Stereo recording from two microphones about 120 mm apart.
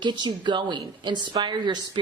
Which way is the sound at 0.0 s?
40° right (ahead or behind).